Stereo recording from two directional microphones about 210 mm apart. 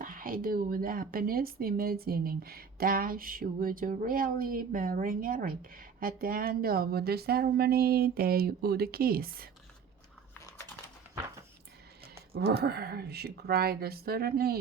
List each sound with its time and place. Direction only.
0.0 s speech: 40° right (ahead or behind)
12.3 s speech: 50° right (ahead or behind)